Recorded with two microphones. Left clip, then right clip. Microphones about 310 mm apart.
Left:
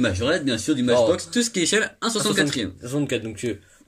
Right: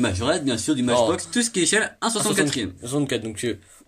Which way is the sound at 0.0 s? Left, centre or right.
Centre.